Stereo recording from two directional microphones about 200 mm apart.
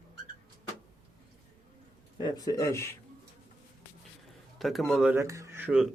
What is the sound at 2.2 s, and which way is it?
Speech, 20° left (ahead or behind).